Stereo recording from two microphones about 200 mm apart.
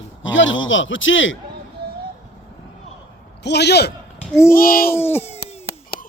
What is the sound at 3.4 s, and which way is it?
Speech, 55° left (ahead or behind).